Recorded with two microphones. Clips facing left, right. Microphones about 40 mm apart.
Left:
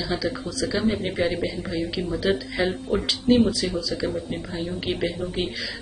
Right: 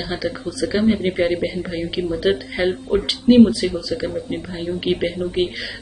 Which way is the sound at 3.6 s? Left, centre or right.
Centre.